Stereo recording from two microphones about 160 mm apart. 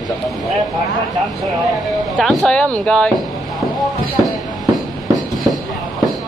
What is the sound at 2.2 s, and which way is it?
Speech, centre (ahead or behind).